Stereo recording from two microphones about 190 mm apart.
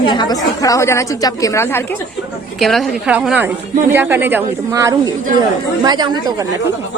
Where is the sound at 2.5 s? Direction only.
Centre (ahead or behind); by 6.5 s 20° right (ahead or behind).